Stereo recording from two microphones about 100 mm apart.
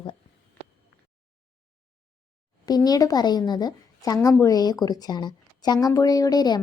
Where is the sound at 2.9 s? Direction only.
40° left (ahead or behind).